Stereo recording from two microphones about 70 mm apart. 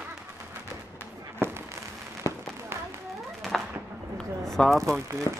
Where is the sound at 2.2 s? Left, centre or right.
Left.